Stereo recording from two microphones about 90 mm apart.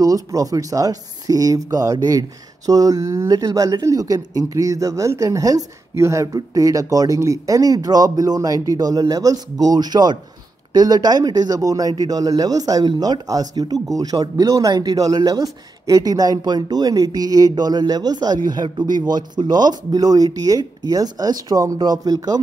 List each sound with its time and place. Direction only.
0.0 s speech: 40° right (ahead or behind)